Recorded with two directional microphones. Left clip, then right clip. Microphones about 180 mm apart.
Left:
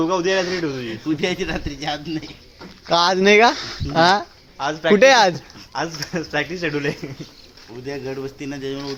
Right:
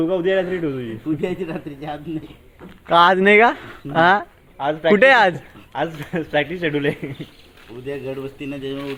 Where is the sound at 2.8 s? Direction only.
15° left (ahead or behind).